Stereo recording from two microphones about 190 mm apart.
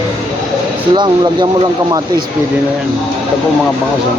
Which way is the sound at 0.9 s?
25° right (ahead or behind).